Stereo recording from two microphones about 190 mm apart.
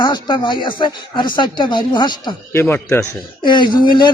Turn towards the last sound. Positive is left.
turn(degrees=25)  # may be behind; listen again after turning